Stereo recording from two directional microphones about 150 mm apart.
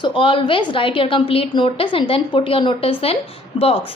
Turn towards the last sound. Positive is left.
turn(degrees=40)  # may be behind; listen again after turning